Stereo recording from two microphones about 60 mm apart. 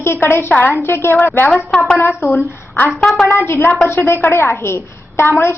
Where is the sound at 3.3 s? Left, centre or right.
Left.